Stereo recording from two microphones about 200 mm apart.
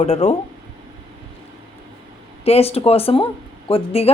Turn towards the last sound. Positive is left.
turn(degrees=30)  # may be behind; listen again after turning